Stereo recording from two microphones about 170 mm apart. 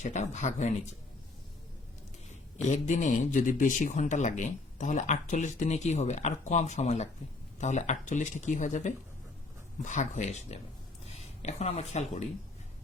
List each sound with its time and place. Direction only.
0.0 s speech: 45° left (ahead or behind)
2.6 s speech: 45° left (ahead or behind)